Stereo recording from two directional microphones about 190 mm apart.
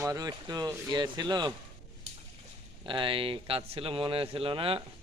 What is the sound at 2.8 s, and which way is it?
Speech, 25° right (ahead or behind).